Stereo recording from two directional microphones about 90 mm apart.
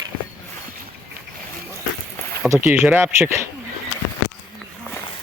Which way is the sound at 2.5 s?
25° right (ahead or behind).